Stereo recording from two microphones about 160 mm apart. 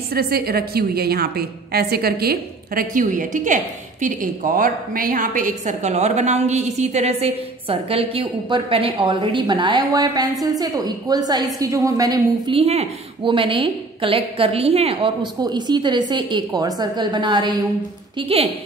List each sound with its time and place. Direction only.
0.1 s a woman's voice: 75° right (ahead or behind); by 12.5 s 25° right (ahead or behind)
12.5 s a woman's voice: 40° right (ahead or behind)
18.1 s a woman's voice: 35° right (ahead or behind)